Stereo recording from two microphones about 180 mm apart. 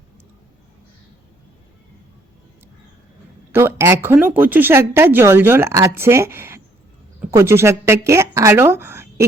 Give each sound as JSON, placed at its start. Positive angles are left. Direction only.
{"t": 3.5, "sound": "a woman's voice", "side_deg": -15}